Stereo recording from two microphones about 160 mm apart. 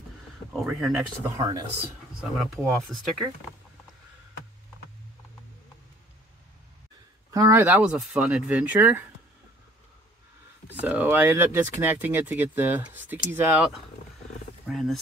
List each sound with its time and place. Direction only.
0.5 s speech: centre (ahead or behind)
1.3 s speech: 20° right (ahead or behind)
2.5 s speech: centre (ahead or behind)
7.3 s speech: 15° right (ahead or behind)
10.8 s speech: 10° right (ahead or behind)
14.7 s speech: centre (ahead or behind)